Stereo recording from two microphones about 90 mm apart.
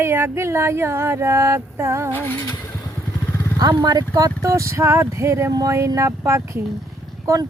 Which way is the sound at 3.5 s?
45° right (ahead or behind).